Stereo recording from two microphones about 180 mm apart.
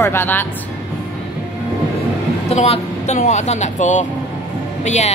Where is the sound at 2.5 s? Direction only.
35° left (ahead or behind).